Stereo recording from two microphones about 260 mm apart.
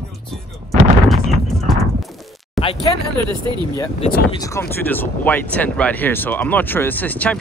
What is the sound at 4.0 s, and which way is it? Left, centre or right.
Speech, left.